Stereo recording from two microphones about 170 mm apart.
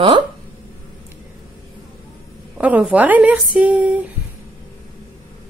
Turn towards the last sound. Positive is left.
turn(degrees=-10)  # may be behind; listen again after turning